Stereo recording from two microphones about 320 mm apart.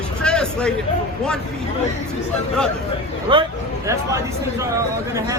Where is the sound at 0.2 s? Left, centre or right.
Centre.